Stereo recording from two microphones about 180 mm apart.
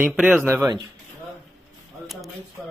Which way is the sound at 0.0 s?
10° right (ahead or behind).